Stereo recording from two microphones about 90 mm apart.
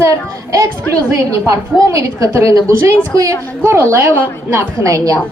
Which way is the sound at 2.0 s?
40° right (ahead or behind).